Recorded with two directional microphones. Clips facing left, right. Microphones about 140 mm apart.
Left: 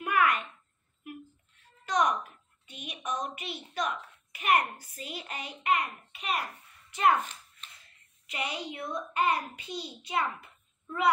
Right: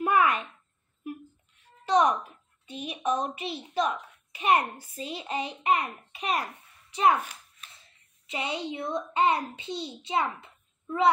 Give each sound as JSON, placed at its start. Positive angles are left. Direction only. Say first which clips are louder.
{"t": 0.0, "sound": "a sound", "louder": "right 3 dB", "side_deg": -30}
{"t": 1.9, "sound": "music", "louder": "right 5 dB", "side_deg": -30}
{"t": 2.7, "sound": "a child's voice", "louder": "right 7 dB", "side_deg": -30}
{"t": 7.0, "sound": "a child's voice", "louder": "right 2 dB", "side_deg": -10}
{"t": 8.3, "sound": "a child's voice", "louder": "right 4 dB", "side_deg": -25}